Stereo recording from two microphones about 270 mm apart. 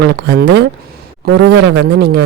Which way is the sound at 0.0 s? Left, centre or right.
Right.